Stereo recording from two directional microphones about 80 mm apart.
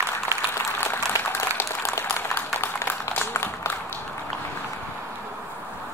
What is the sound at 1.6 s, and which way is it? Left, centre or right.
Applause, left.